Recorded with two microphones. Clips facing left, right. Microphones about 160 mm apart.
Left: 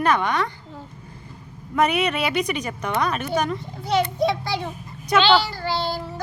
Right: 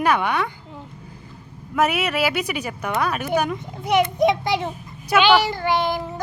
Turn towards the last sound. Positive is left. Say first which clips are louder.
# right 4 dB
turn(degrees=-20)  # may be behind; listen again after turning